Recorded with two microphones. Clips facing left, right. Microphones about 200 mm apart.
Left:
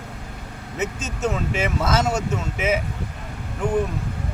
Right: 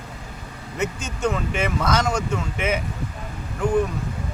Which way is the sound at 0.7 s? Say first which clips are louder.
Even; 5° left (ahead or behind).